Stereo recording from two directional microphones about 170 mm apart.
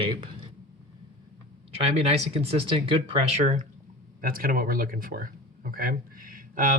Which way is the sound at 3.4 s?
45° right (ahead or behind).